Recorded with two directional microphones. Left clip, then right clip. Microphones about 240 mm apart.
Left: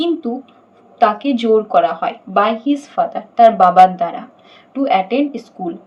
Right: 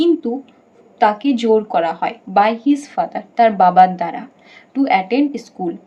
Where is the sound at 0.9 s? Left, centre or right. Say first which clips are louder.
Left 1 dB; centre.